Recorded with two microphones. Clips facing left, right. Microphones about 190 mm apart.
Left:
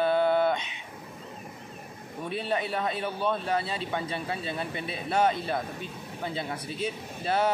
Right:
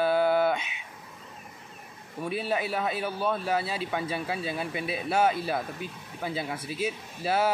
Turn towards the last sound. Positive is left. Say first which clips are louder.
# even
turn(degrees=-5)  # may be behind; listen again after turning